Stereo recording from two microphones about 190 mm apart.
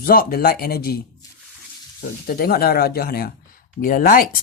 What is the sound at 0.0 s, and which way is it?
Speech, 50° left (ahead or behind).